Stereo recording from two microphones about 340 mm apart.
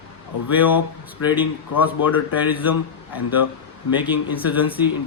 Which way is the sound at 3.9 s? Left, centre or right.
Centre.